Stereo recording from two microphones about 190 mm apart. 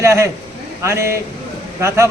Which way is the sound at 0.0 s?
15° right (ahead or behind).